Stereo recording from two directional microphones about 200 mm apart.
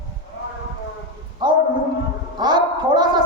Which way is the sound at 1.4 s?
20° right (ahead or behind).